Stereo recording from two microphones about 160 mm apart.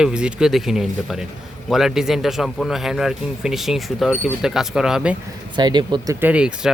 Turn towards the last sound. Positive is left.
turn(degrees=-5)  # may be behind; listen again after turning